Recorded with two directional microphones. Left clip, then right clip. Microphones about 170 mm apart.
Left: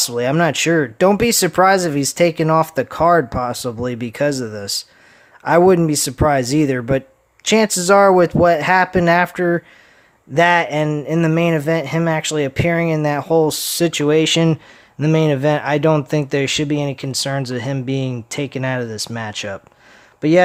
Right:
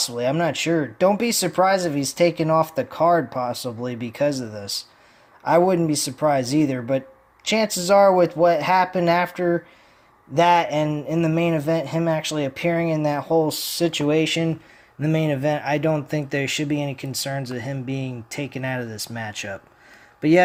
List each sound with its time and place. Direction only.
0.0 s speech: 40° left (ahead or behind)